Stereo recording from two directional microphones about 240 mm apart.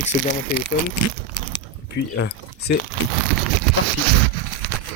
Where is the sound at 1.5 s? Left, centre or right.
Left.